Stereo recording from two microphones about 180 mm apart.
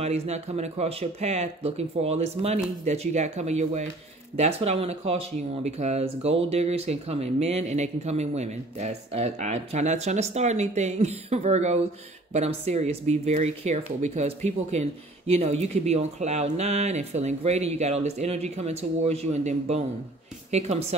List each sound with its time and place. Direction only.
0.0 s speech: 35° right (ahead or behind)